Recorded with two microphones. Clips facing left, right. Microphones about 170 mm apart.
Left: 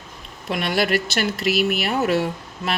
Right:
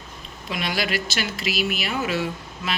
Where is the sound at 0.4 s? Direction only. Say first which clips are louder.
Left 5 dB; 60° left (ahead or behind).